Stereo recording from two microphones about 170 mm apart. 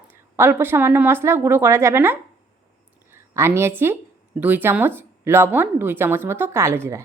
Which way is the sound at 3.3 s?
15° right (ahead or behind).